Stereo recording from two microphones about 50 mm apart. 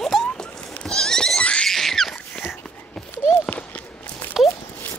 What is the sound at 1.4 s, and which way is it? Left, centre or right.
Wild animals, left.